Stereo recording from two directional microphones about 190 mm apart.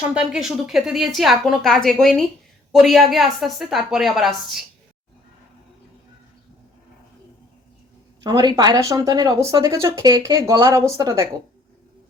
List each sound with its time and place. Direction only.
0.1 s a woman's voice: 5° right (ahead or behind)
8.2 s speech: 20° right (ahead or behind)